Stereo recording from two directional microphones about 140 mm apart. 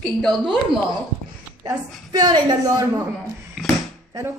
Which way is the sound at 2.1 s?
30° right (ahead or behind).